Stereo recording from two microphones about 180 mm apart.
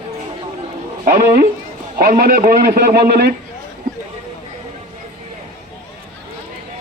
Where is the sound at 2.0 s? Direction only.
55° right (ahead or behind).